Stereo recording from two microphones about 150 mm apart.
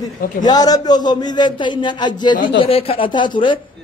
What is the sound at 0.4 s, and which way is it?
A man's voice, 25° left (ahead or behind).